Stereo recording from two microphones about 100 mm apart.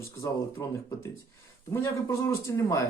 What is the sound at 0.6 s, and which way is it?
Speech, 35° left (ahead or behind).